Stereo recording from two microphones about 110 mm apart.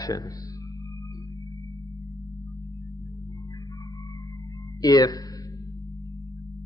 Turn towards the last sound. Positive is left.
turn(degrees=35)  # may be behind; listen again after turning